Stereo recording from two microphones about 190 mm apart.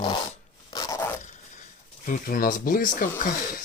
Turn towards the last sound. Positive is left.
turn(degrees=45)  # may be behind; listen again after turning